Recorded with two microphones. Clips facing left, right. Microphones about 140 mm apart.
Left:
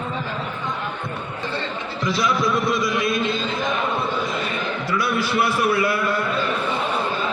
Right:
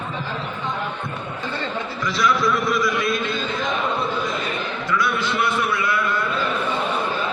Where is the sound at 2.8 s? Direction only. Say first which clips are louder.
Even; 25° left (ahead or behind).